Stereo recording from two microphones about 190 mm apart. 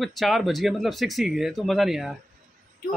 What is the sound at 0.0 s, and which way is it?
Speech, centre (ahead or behind).